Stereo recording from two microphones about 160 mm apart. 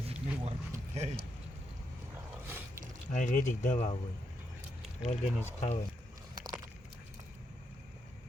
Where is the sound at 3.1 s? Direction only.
50° left (ahead or behind).